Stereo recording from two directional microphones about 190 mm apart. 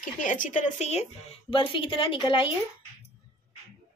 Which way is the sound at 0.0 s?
40° left (ahead or behind).